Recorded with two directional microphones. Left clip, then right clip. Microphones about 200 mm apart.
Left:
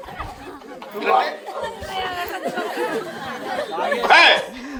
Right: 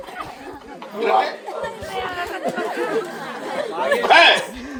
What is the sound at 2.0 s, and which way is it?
Chatter, 55° left (ahead or behind).